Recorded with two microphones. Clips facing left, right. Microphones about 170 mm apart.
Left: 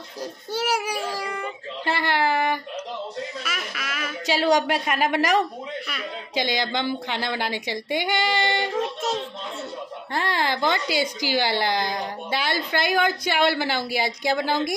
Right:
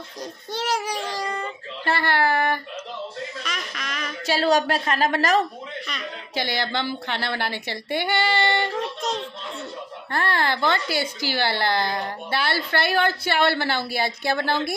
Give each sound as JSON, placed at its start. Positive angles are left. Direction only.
{"t": 0.2, "sound": "child singing", "side_deg": 10}
{"t": 3.4, "sound": "a sound", "side_deg": 5}
{"t": 4.3, "sound": "a woman's voice", "side_deg": 15}
{"t": 8.7, "sound": "child singing", "side_deg": 5}
{"t": 10.1, "sound": "a woman's voice", "side_deg": 15}